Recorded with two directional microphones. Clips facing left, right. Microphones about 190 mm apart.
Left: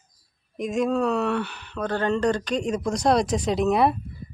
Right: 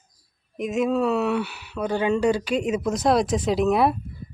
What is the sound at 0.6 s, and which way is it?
Speech, 5° right (ahead or behind).